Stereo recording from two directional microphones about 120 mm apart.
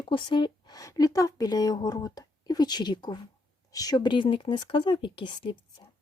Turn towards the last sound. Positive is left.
turn(degrees=45)  # may be behind; listen again after turning